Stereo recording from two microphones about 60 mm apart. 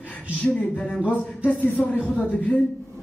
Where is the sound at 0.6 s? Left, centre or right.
Centre.